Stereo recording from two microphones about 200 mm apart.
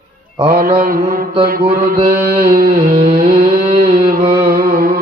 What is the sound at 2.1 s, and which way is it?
Carnatic music, 10° right (ahead or behind).